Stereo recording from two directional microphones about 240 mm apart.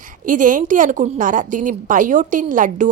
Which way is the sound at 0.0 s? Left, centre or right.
Right.